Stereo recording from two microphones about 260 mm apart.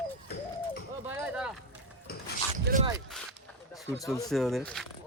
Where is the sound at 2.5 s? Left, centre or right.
Right.